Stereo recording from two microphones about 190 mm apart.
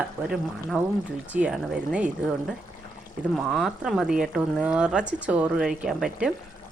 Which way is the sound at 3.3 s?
Centre (ahead or behind).